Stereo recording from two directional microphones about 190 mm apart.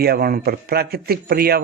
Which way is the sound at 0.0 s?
55° right (ahead or behind).